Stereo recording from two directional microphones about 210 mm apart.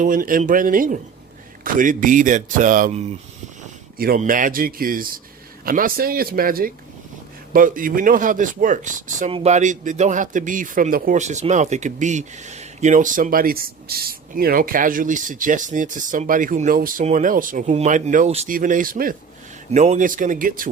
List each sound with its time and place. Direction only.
0.0 s speech: 40° right (ahead or behind)